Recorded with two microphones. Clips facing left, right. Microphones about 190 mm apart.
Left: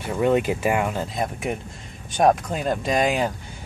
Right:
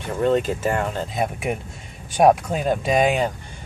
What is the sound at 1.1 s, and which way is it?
Speech, 5° right (ahead or behind).